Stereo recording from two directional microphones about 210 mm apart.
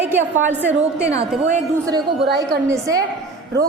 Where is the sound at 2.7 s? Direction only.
15° right (ahead or behind).